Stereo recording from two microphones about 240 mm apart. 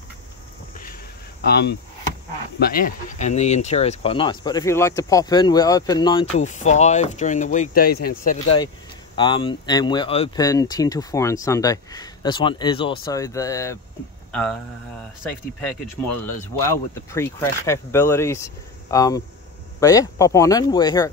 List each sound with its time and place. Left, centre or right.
1.4 s speech: left; by 6.2 s centre
6.4 s speech: left
9.1 s speech: centre
16.6 s speech: centre